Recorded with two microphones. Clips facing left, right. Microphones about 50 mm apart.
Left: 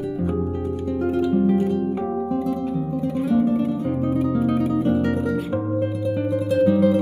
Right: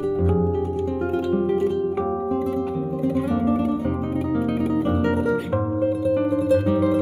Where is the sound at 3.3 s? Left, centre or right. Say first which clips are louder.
Left 1 dB; centre.